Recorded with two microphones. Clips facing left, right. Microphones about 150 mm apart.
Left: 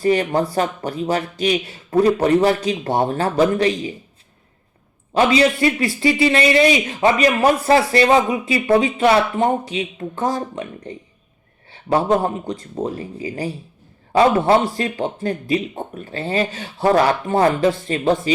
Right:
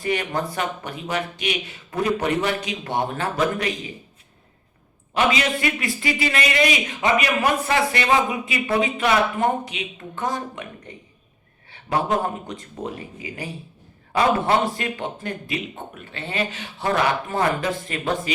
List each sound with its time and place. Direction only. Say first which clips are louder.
0.0 s speech: left 7 dB; 35° left (ahead or behind)
5.1 s speech: left 6 dB; 35° left (ahead or behind)